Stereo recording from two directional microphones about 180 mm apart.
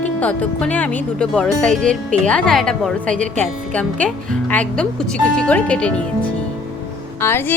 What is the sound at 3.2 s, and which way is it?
Speech, 45° right (ahead or behind).